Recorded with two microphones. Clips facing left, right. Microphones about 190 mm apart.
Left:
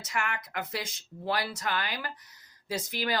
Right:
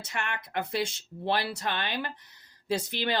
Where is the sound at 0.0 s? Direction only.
30° right (ahead or behind).